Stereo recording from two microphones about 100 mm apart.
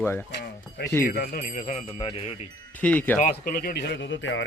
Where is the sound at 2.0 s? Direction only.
75° left (ahead or behind).